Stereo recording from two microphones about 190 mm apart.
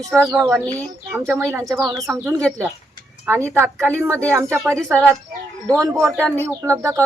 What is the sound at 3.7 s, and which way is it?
Speech, 5° left (ahead or behind).